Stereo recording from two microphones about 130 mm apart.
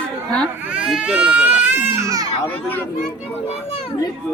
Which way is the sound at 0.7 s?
5° right (ahead or behind).